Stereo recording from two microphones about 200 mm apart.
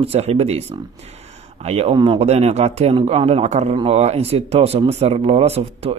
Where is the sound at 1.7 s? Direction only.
30° right (ahead or behind).